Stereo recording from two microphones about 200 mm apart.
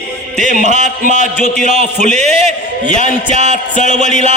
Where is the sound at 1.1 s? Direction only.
40° right (ahead or behind).